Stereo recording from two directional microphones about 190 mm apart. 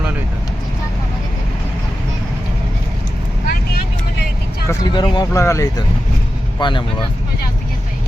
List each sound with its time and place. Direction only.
4.7 s speech: 20° left (ahead or behind)